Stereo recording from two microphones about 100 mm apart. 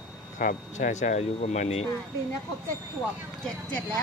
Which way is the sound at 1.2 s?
90° left.